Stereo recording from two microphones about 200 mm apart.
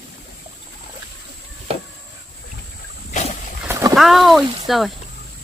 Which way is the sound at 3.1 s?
35° left (ahead or behind).